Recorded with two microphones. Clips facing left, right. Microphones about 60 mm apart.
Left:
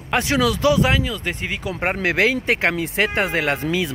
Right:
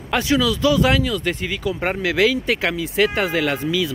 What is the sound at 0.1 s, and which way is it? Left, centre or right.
Speech, left.